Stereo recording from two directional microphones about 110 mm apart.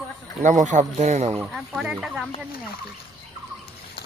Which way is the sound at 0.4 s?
90° right.